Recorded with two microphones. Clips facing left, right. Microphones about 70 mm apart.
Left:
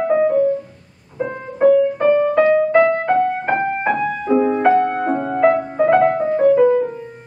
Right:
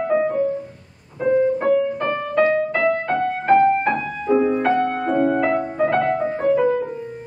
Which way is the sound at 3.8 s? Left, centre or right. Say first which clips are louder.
Left 3 dB; left.